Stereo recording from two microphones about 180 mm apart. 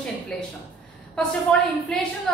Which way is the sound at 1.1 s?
5° left (ahead or behind).